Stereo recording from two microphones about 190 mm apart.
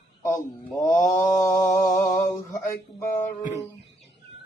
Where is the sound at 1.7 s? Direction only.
40° left (ahead or behind).